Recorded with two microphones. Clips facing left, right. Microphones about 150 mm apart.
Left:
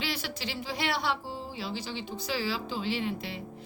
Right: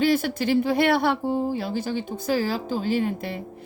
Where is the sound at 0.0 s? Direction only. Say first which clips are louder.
Right 14 dB; 50° right (ahead or behind).